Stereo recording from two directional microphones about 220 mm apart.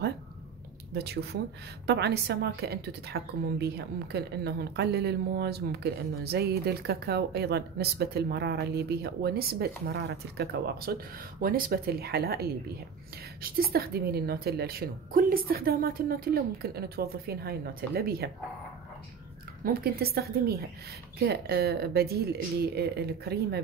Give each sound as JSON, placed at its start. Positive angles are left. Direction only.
{"t": 0.9, "sound": "a woman's voice", "side_deg": -45}
{"t": 19.6, "sound": "a woman's voice", "side_deg": -45}